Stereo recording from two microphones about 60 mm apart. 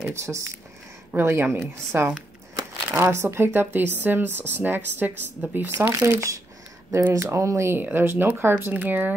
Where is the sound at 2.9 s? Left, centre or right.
Right.